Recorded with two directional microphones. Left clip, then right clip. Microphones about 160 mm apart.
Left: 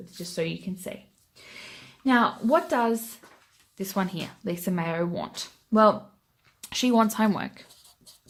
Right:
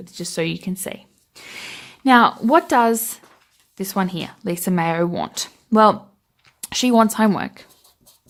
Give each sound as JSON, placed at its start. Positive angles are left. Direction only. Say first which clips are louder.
{"t": 0.0, "sound": "speech", "louder": "right 6 dB", "side_deg": -55}
{"t": 3.8, "sound": "speech", "louder": "right 6 dB", "side_deg": -35}
{"t": 6.4, "sound": "speech", "louder": "right 6 dB", "side_deg": -35}